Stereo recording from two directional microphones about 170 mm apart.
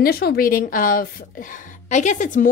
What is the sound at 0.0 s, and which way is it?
A woman's voice, 65° left (ahead or behind).